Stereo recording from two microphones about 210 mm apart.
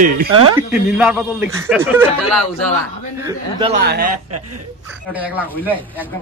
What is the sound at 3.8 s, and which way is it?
Speech, 50° right (ahead or behind).